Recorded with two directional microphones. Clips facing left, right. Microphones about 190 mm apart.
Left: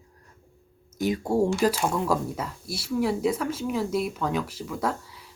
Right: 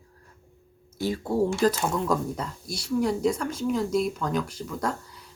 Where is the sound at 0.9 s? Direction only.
15° left (ahead or behind).